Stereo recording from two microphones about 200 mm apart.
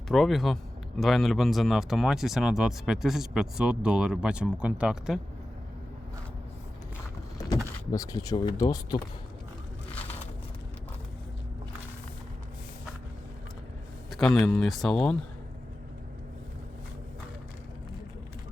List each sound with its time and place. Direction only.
0.1 s speech: centre (ahead or behind)
7.3 s vehicle: 15° left (ahead or behind)
7.9 s speech: 15° left (ahead or behind)
9.9 s a sound: 10° left (ahead or behind)
14.1 s speech: centre (ahead or behind)